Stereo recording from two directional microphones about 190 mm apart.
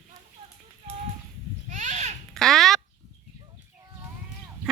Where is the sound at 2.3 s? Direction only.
Centre (ahead or behind).